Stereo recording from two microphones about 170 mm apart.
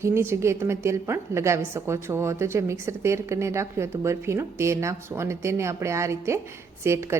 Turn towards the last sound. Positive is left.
turn(degrees=-15)  # may be behind; listen again after turning